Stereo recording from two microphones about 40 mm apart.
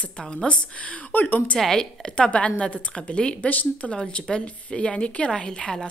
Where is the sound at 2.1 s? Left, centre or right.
Left.